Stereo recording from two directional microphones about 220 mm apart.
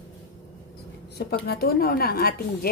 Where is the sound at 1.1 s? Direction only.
45° left (ahead or behind).